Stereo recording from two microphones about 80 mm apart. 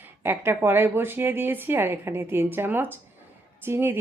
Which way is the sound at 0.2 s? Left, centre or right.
Right.